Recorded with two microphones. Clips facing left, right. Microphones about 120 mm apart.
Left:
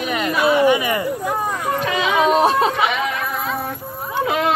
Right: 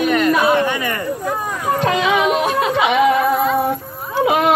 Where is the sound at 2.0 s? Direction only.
35° left (ahead or behind).